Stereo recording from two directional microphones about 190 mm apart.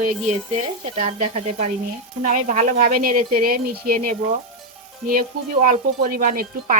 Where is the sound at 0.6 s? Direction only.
35° right (ahead or behind).